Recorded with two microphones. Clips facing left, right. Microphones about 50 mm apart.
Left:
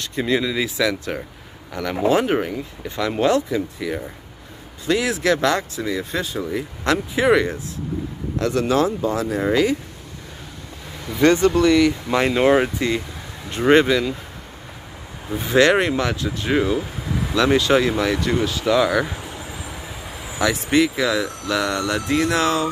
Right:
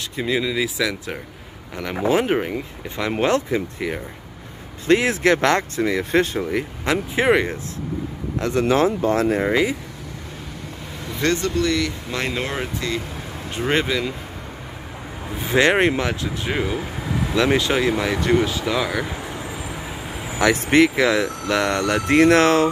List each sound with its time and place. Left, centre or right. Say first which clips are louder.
0.0 s speech: left 2 dB; centre
1.7 s speech: left 2 dB; centre
3.0 s speech: left 1 dB; right
6.8 s speech: left 2 dB; centre
7.2 s speech: left 1 dB; right
9.0 s speech: right 3 dB; right
9.4 s speech: left 1 dB; right
11.2 s speech: left 6 dB; centre
13.6 s speech: left 6 dB; centre
15.5 s speech: left 1 dB; right
17.3 s speech: left 3 dB; centre
18.8 s speech: left 7 dB; centre
20.3 s speech: right 2 dB; right